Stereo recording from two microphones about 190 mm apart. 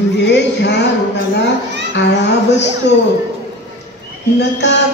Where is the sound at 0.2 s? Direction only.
65° left (ahead or behind).